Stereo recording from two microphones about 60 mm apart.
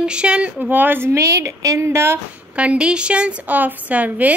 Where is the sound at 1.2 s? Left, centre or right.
Right.